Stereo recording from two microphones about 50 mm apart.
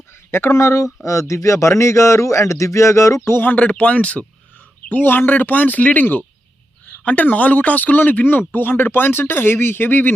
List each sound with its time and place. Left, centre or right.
0.1 s speech: left
1.3 s speech: left
3.4 s speech: left
4.9 s speech: left